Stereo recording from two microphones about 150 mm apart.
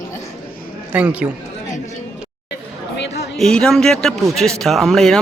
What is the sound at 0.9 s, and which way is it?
Speech, 10° right (ahead or behind).